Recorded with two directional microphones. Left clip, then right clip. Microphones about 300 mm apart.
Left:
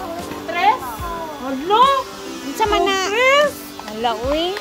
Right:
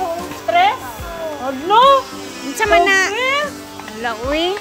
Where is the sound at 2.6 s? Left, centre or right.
Centre.